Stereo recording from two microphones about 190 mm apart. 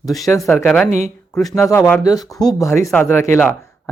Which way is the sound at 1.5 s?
15° left (ahead or behind).